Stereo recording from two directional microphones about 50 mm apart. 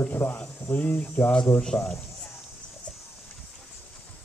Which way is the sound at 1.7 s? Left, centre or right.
Left.